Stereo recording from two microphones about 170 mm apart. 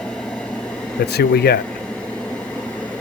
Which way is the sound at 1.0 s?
70° left (ahead or behind).